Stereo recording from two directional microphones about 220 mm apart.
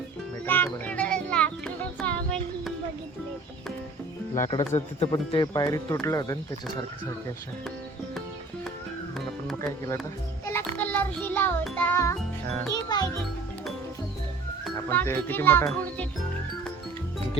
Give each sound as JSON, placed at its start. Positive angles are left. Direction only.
{"t": 0.4, "sound": "music", "side_deg": 10}
{"t": 4.4, "sound": "speech", "side_deg": 25}
{"t": 9.6, "sound": "speech", "side_deg": 15}
{"t": 10.4, "sound": "music", "side_deg": 10}
{"t": 12.7, "sound": "speech", "side_deg": 20}
{"t": 14.6, "sound": "a child's voice", "side_deg": 10}